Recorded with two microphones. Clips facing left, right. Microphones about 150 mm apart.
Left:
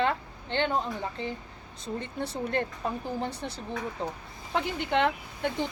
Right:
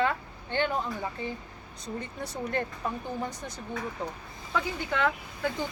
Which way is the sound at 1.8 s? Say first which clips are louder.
Left 3 dB; 30° left (ahead or behind).